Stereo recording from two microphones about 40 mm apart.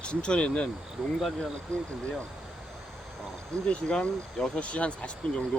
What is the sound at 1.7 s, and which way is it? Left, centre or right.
Speech, left.